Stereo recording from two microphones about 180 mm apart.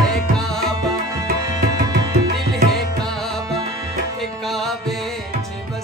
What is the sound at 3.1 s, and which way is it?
Music, centre (ahead or behind).